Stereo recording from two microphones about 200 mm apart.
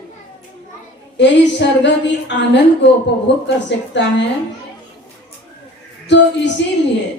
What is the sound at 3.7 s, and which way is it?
Speech, 60° left (ahead or behind).